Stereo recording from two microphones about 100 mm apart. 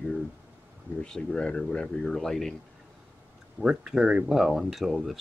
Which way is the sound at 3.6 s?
5° right (ahead or behind).